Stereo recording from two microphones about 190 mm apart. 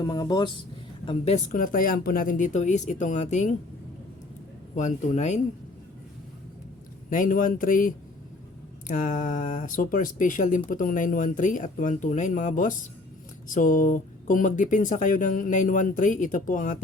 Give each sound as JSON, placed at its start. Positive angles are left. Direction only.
{"t": 0.0, "sound": "speech", "side_deg": 20}
{"t": 1.0, "sound": "speech", "side_deg": 35}
{"t": 4.7, "sound": "speech", "side_deg": 40}
{"t": 7.1, "sound": "speech", "side_deg": 45}